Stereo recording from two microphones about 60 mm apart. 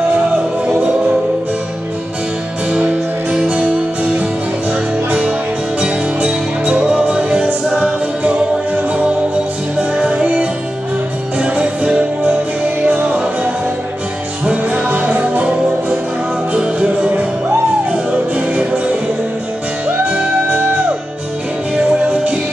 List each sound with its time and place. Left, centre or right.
2.9 s music: centre
5.8 s music: centre
7.7 s choir: centre
9.8 s music: centre
16.5 s music: centre
20.1 s music: right
22.0 s music: right